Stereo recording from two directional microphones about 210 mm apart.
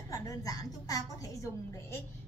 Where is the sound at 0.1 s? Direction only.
15° left (ahead or behind).